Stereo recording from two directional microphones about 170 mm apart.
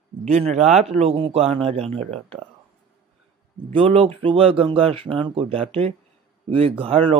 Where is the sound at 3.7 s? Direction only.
35° right (ahead or behind).